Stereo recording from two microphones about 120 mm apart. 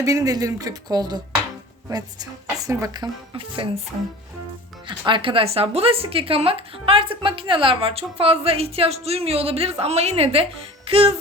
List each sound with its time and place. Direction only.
0.0 s a woman's voice: 25° right (ahead or behind); by 3.7 s 45° right (ahead or behind)
4.9 s a woman's voice: 40° right (ahead or behind)